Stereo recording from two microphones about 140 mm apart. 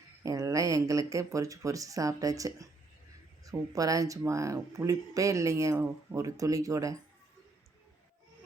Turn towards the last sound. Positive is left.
turn(degrees=-25)  # may be behind; listen again after turning